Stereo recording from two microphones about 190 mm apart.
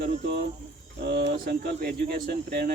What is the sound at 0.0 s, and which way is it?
Speech, 40° right (ahead or behind).